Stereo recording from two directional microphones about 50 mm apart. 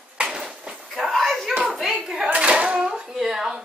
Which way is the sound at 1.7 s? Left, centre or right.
Centre.